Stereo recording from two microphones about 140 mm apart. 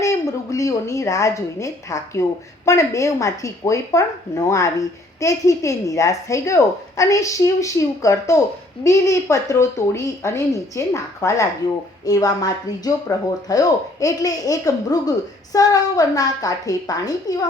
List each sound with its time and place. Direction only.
0.5 s speech: 20° left (ahead or behind)